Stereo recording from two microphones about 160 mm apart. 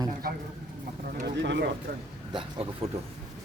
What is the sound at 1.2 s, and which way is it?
Speech, 90° right.